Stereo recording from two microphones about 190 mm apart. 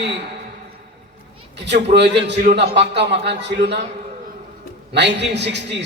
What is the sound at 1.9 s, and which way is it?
A man's voice, 65° right (ahead or behind).